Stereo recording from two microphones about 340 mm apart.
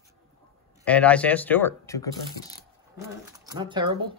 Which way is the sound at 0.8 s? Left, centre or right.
Centre.